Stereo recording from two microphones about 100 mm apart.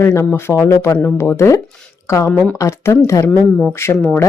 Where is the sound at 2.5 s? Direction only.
30° left (ahead or behind).